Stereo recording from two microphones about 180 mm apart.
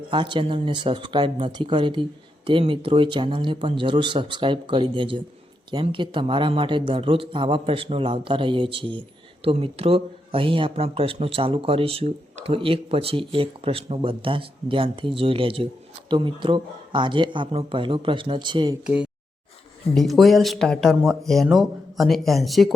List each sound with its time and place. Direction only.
0.1 s speech: 25° right (ahead or behind)
19.9 s speech: centre (ahead or behind)